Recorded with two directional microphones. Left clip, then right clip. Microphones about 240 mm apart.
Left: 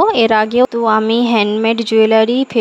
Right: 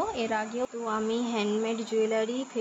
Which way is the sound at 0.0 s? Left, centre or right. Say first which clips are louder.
Left 18 dB; left.